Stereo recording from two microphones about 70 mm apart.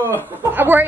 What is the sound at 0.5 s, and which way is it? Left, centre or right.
Speech, right.